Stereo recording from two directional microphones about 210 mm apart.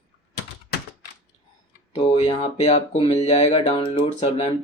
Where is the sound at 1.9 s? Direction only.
30° left (ahead or behind).